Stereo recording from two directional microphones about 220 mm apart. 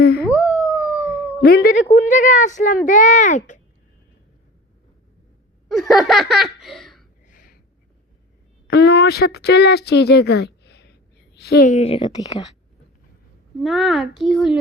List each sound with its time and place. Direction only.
0.0 s howl: 45° left (ahead or behind)
0.3 s howl: 5° right (ahead or behind)
1.4 s a child's voice: 45° left (ahead or behind)
5.6 s laughter: centre (ahead or behind)
7.3 s a sound: 40° left (ahead or behind)
8.6 s a woman's voice: 50° left (ahead or behind)
11.7 s a woman's voice: 30° left (ahead or behind)
13.6 s a child's voice: centre (ahead or behind)